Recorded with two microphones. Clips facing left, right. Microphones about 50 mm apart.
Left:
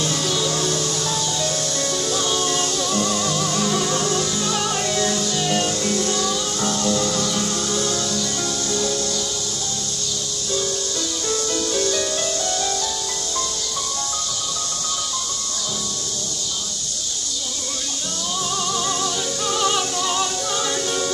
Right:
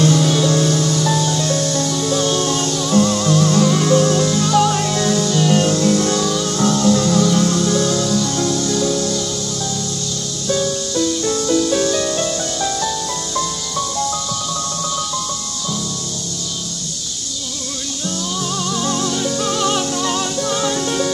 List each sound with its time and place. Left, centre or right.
0.2 s music: centre
0.7 s music: centre
11.0 s music: centre
18.7 s music: centre